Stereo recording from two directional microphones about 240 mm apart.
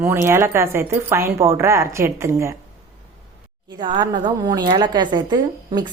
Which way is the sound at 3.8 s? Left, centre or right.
Centre.